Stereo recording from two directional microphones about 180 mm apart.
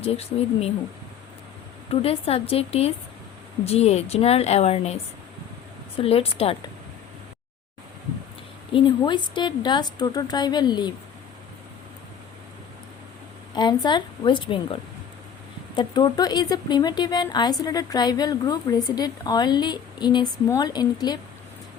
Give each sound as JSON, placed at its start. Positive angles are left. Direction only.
{"t": 0.0, "sound": "a woman's voice", "side_deg": 35}
{"t": 1.9, "sound": "a woman's voice", "side_deg": 30}
{"t": 6.0, "sound": "a woman's voice", "side_deg": 35}
{"t": 8.7, "sound": "speech", "side_deg": 25}
{"t": 13.5, "sound": "speech", "side_deg": 25}